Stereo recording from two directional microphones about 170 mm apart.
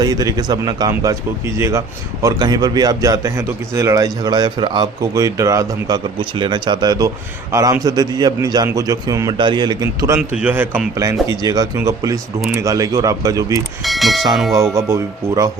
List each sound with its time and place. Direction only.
0.0 s speech: 20° right (ahead or behind)
10.2 s speech: 5° right (ahead or behind)
13.8 s speech: centre (ahead or behind)
14.8 s speech: 20° right (ahead or behind)